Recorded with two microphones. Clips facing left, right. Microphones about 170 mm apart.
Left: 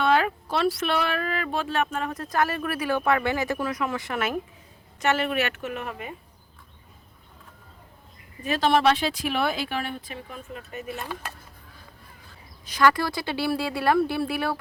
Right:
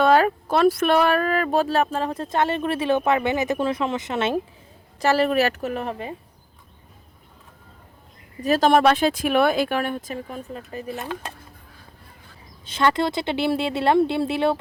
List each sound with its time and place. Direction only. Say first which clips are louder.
0.0 s speech: right 5 dB; 40° right (ahead or behind); by 4.4 s 25° right (ahead or behind)
4.9 s a woman's voice: right 5 dB; 35° right (ahead or behind)
8.4 s a woman's voice: right 5 dB; 40° right (ahead or behind)
10.9 s speech: right 4 dB; 20° right (ahead or behind)
12.6 s speech: right 1 dB; 25° right (ahead or behind)